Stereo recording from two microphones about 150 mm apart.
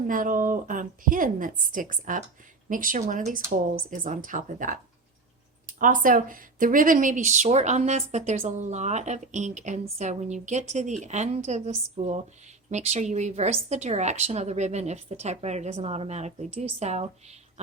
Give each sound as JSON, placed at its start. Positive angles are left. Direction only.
{"t": 0.0, "sound": "speech", "side_deg": -65}
{"t": 5.8, "sound": "a woman's voice", "side_deg": -65}